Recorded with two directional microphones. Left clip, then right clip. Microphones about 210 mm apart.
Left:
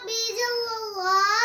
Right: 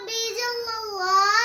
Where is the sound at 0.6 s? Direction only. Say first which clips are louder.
Even; 5° right (ahead or behind).